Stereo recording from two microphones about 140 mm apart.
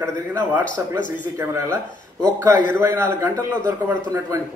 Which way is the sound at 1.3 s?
20° right (ahead or behind).